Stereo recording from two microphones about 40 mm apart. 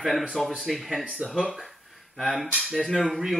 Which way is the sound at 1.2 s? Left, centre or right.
Right.